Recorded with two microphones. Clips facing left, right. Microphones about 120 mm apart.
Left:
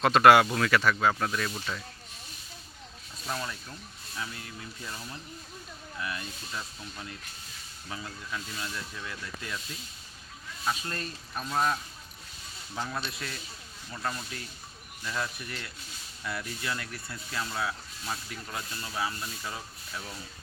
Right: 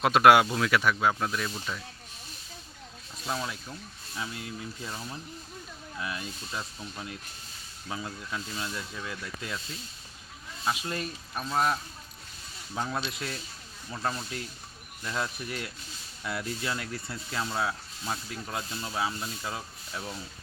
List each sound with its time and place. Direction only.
0.0 s speech: 5° right (ahead or behind)
3.2 s speech: 5° right (ahead or behind)
4.9 s speech: 20° right (ahead or behind)
10.7 s speech: 10° right (ahead or behind); by 20.1 s 25° right (ahead or behind)